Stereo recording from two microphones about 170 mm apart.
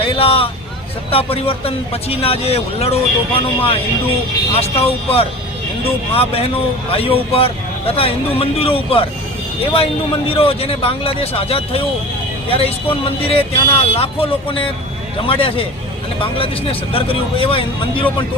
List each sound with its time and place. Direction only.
0.0 s vehicle: 35° left (ahead or behind)
1.1 s speech: 35° left (ahead or behind)